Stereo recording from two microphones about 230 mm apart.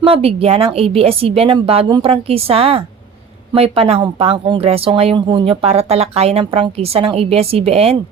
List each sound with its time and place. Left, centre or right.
0.0 s speech: right